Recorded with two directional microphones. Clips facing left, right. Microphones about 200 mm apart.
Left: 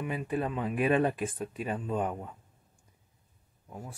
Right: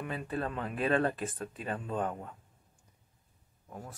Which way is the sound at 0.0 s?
10° left (ahead or behind).